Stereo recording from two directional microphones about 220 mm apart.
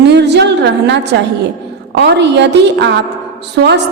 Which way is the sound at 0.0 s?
50° right (ahead or behind).